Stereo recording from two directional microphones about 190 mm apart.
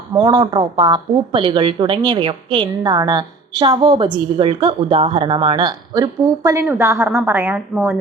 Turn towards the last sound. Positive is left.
turn(degrees=0)  # may be behind; listen again after turning